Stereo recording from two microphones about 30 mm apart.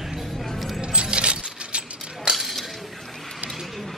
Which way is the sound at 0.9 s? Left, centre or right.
Right.